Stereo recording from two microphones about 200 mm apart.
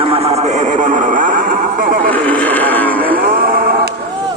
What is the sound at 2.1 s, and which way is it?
Music, 10° left (ahead or behind).